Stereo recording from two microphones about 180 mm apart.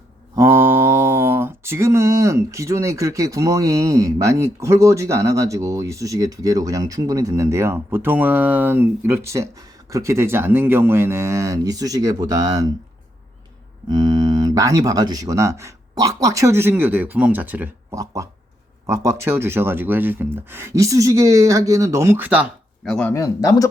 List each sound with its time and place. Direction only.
0.3 s mantra: 10° right (ahead or behind)
13.9 s speech: 20° right (ahead or behind)
18.9 s mantra: 15° right (ahead or behind)
22.8 s speech: 5° left (ahead or behind)
23.1 s speech: 20° left (ahead or behind)